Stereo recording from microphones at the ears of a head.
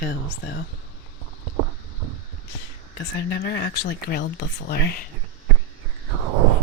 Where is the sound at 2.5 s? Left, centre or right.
Left.